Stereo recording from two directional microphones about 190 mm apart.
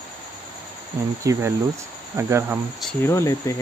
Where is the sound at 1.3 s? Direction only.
15° right (ahead or behind).